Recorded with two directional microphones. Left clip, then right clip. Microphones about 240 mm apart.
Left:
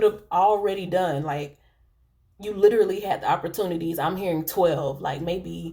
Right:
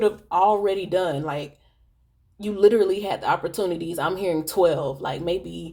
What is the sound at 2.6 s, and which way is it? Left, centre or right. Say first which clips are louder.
Speech: right 1 dB; right.